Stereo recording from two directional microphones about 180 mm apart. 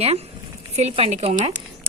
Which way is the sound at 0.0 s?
35° right (ahead or behind).